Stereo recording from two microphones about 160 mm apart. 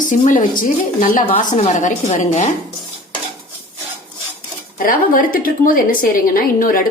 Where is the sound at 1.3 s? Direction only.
45° left (ahead or behind).